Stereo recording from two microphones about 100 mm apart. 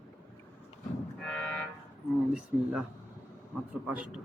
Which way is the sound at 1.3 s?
10° left (ahead or behind).